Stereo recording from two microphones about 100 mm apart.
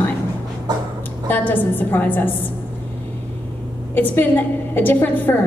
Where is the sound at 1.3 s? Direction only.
20° left (ahead or behind).